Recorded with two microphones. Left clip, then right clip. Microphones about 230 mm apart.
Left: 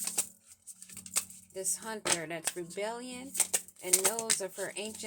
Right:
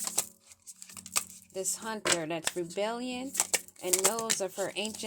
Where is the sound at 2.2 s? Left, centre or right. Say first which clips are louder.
Right 4 dB; right.